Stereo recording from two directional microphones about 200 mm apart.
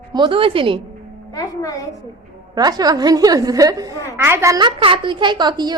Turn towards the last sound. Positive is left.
turn(degrees=-20)  # may be behind; listen again after turning